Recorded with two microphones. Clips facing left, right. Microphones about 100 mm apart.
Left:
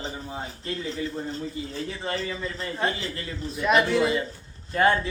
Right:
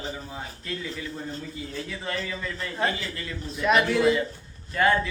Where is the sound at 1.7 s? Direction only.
30° left (ahead or behind).